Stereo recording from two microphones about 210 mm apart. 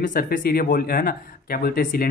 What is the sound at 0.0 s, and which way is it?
Speech, 40° left (ahead or behind).